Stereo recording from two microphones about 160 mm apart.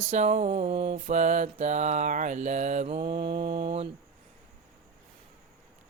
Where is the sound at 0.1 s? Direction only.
45° right (ahead or behind).